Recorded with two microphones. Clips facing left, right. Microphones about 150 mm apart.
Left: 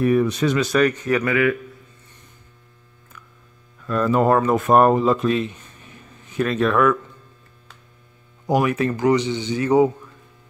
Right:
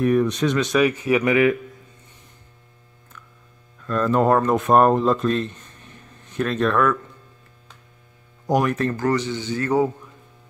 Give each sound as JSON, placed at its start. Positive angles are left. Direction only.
{"t": 0.0, "sound": "speech", "side_deg": 5}
{"t": 0.8, "sound": "speech", "side_deg": -10}
{"t": 3.8, "sound": "speech", "side_deg": 5}
{"t": 8.5, "sound": "speech", "side_deg": 5}